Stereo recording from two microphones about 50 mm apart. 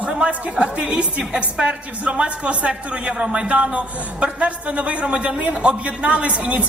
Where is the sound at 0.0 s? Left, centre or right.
Right.